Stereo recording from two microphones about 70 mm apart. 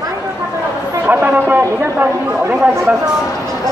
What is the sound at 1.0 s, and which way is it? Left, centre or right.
Speech, right.